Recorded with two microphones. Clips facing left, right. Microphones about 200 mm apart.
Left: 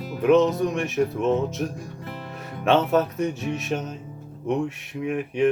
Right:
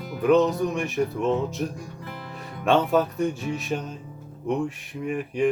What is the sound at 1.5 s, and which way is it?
Speech, centre (ahead or behind).